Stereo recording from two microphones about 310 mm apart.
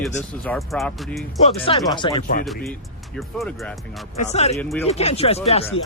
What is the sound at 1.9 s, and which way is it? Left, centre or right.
Speech, centre.